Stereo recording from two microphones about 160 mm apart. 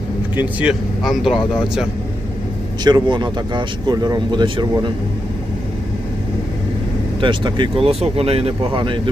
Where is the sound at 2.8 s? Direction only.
25° right (ahead or behind).